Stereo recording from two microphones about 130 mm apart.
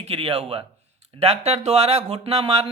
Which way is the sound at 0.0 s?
50° right (ahead or behind).